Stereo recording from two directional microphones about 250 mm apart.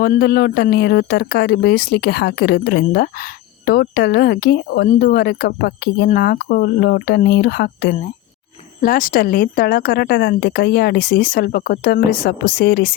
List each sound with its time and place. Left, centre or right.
0.0 s speech: left